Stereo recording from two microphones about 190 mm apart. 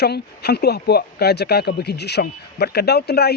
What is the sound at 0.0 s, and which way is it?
Speech, 60° left (ahead or behind).